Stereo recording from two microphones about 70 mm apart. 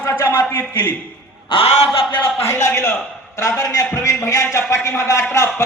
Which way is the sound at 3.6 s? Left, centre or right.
Left.